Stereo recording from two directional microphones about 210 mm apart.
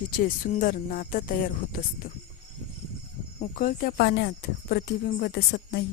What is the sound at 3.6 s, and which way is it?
Speech, 40° left (ahead or behind).